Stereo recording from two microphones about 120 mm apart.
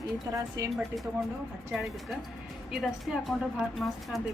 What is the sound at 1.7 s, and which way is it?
Speech, centre (ahead or behind).